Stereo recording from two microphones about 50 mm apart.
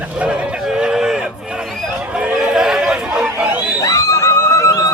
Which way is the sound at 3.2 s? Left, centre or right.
Right.